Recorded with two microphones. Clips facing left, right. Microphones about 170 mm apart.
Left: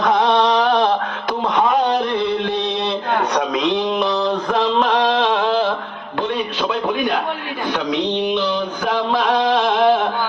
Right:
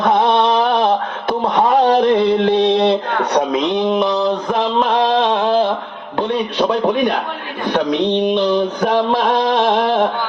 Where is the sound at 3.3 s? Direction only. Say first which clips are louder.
Right 3 dB; 25° right (ahead or behind).